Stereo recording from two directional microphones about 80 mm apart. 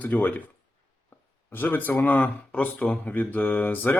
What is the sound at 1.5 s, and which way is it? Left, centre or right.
Speech, left.